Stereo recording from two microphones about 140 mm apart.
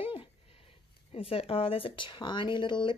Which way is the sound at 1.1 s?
45° left (ahead or behind).